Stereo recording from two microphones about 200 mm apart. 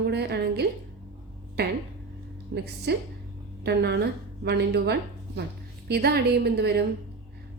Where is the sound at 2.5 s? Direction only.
55° right (ahead or behind).